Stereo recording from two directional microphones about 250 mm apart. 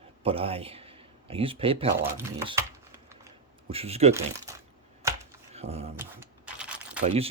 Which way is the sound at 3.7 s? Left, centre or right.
Right.